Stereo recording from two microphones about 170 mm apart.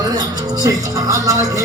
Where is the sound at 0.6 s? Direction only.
20° right (ahead or behind).